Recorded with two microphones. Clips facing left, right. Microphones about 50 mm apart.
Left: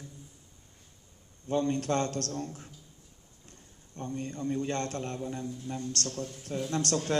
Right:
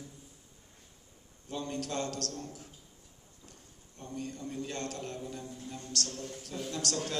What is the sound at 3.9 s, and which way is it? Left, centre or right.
A man's voice, left.